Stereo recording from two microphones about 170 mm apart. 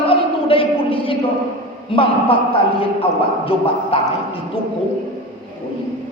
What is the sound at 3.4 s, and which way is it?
Speech, 35° left (ahead or behind).